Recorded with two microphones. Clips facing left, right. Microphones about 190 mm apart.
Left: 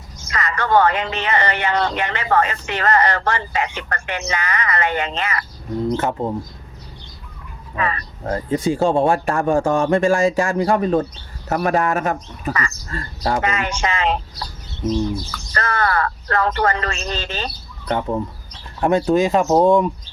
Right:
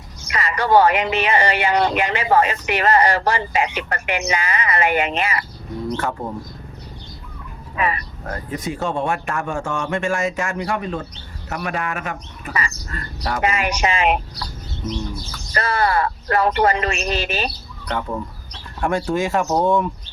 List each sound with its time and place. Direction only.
0.3 s a sound: 25° right (ahead or behind)
0.5 s speech: 15° right (ahead or behind)
3.1 s speech: 15° right (ahead or behind)
4.4 s speech: 25° right (ahead or behind)
4.8 s speech: 15° right (ahead or behind)
5.2 s speech: 25° right (ahead or behind)
6.0 s speech: 20° left (ahead or behind)
7.8 s vehicle: 15° right (ahead or behind)
8.3 s speech: 30° left (ahead or behind)
12.9 s speech: 30° left (ahead or behind)
13.6 s speech: 15° right (ahead or behind)
15.5 s speech: 15° right (ahead or behind)
17.8 s speech: 20° left (ahead or behind)